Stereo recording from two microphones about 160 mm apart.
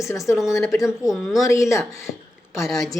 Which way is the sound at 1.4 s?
20° left (ahead or behind).